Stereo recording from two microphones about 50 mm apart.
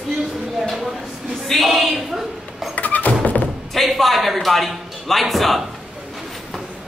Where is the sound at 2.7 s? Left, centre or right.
Left.